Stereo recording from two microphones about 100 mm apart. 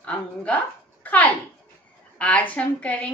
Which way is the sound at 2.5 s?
15° left (ahead or behind).